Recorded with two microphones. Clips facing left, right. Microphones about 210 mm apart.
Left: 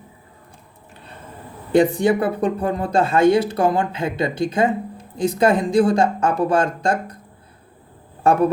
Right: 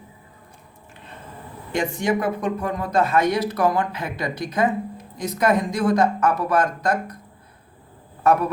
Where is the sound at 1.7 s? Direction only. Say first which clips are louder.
Left 7 dB; 35° left (ahead or behind).